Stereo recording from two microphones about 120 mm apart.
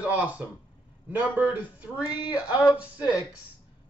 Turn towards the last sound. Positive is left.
turn(degrees=-10)  # may be behind; listen again after turning